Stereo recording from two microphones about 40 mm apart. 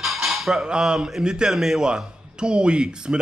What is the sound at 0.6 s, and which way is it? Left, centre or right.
A man's voice, right.